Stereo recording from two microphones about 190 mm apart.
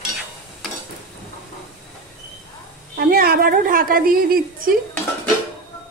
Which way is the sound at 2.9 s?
55° right (ahead or behind).